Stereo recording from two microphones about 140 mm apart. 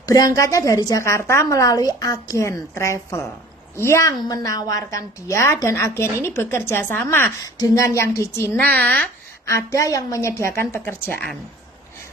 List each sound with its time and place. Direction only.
0.0 s a woman's voice: 25° left (ahead or behind); by 9.0 s 10° left (ahead or behind)
9.5 s a woman's voice: 20° left (ahead or behind)